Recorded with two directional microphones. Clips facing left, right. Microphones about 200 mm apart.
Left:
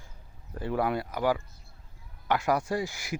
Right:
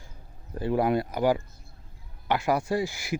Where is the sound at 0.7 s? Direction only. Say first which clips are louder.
Right 4 dB; 20° right (ahead or behind).